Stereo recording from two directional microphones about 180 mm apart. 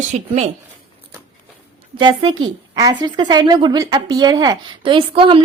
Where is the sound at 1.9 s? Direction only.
30° right (ahead or behind).